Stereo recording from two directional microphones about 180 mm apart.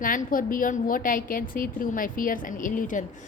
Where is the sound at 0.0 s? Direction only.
50° left (ahead or behind).